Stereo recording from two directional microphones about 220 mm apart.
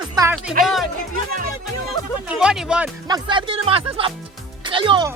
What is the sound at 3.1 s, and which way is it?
Speech, 20° right (ahead or behind).